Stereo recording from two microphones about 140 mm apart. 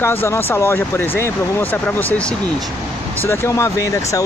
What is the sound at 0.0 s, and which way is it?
Speech, 15° left (ahead or behind).